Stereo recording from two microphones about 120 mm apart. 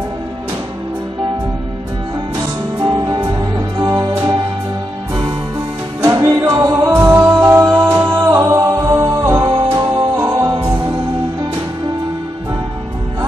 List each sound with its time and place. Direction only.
2.3 s music: 30° right (ahead or behind)
5.9 s music: 25° right (ahead or behind)